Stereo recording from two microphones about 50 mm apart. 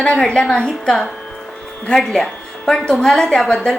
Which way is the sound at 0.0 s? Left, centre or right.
Centre.